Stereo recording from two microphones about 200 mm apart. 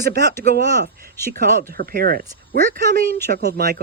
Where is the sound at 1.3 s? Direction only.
45° right (ahead or behind).